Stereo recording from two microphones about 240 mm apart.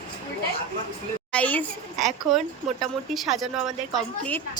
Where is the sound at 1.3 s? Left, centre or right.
Centre.